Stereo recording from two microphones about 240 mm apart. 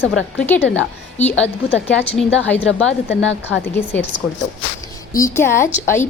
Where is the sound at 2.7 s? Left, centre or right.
Left.